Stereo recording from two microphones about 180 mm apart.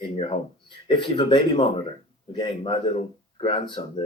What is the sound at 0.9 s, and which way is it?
Speech, 25° left (ahead or behind).